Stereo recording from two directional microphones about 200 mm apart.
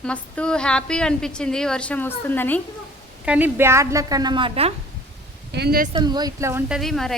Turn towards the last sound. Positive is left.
turn(degrees=0)  # may be behind; listen again after turning